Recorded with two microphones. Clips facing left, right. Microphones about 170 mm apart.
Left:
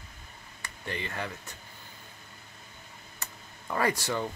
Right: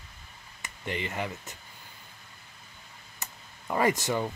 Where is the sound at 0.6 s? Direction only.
20° right (ahead or behind).